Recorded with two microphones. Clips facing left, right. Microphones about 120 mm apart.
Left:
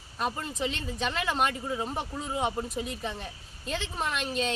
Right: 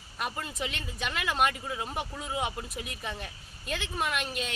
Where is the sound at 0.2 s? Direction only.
30° left (ahead or behind).